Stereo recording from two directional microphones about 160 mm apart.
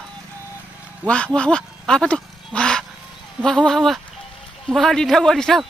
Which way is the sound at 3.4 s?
5° left (ahead or behind).